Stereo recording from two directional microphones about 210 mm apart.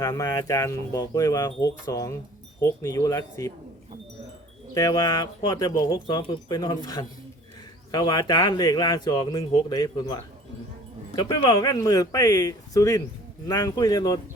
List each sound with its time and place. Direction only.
0.0 s speech: 15° left (ahead or behind)
4.7 s speech: 15° left (ahead or behind)